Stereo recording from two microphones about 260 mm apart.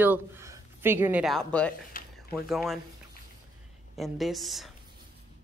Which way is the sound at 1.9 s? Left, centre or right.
Left.